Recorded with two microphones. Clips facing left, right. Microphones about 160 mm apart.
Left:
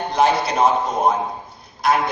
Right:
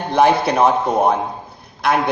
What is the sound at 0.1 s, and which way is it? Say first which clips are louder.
A man's voice: right 4 dB; 60° right (ahead or behind).